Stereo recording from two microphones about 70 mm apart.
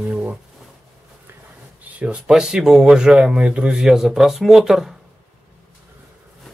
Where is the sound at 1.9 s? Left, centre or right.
Centre.